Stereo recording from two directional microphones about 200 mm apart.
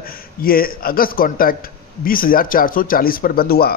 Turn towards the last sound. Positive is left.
turn(degrees=50)  # may be behind; listen again after turning